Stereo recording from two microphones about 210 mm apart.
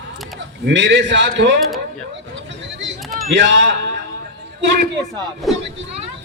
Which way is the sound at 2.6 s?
60° right (ahead or behind).